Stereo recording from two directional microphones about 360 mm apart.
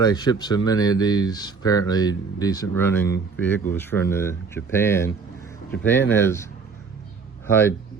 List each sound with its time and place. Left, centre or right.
0.0 s speech: centre